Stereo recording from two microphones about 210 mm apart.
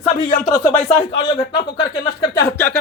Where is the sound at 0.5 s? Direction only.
15° left (ahead or behind).